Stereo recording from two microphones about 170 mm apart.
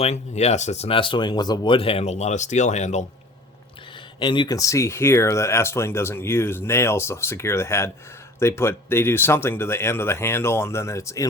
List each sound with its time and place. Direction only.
0.0 s speech: 40° left (ahead or behind)
4.2 s speech: 25° left (ahead or behind)